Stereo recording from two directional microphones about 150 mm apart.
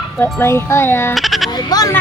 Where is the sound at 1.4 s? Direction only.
25° left (ahead or behind).